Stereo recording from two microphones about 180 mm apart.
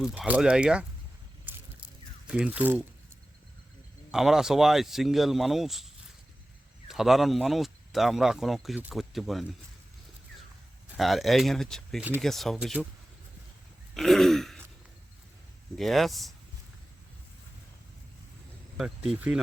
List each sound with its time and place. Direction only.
0.0 s speech: 5° right (ahead or behind)
2.2 s speech: 5° right (ahead or behind)
4.1 s speech: centre (ahead or behind)
10.9 s speech: centre (ahead or behind)
13.9 s throat clearing: centre (ahead or behind)
15.8 s speech: centre (ahead or behind)
18.8 s speech: 5° right (ahead or behind)